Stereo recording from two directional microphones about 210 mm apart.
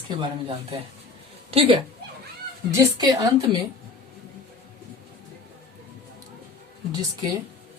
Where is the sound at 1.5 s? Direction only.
30° right (ahead or behind).